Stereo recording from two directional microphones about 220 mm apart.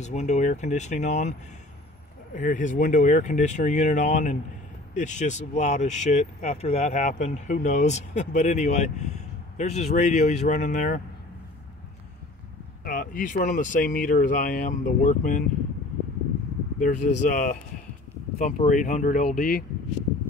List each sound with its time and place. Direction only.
0.0 s speech: 30° left (ahead or behind)
2.3 s speech: 35° left (ahead or behind)
12.8 s speech: 40° left (ahead or behind)
16.8 s speech: 35° left (ahead or behind)